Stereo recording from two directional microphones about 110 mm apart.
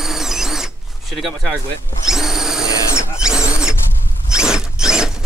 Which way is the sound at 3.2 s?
5° right (ahead or behind).